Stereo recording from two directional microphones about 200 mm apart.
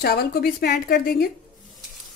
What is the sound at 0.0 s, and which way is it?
A woman's voice, 50° left (ahead or behind).